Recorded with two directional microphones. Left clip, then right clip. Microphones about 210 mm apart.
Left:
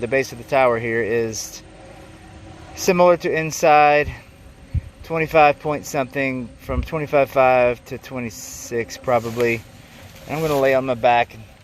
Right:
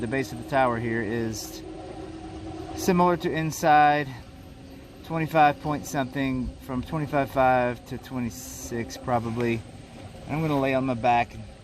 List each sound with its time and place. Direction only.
0.0 s a man's voice: 20° left (ahead or behind)
2.7 s a man's voice: 20° left (ahead or behind)